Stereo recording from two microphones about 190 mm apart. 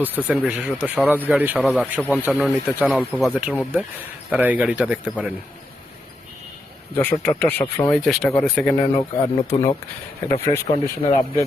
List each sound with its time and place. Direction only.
0.0 s speech: 5° right (ahead or behind)
7.0 s speech: 10° left (ahead or behind)
9.0 s speech: 30° left (ahead or behind)
10.4 s speech: 15° left (ahead or behind)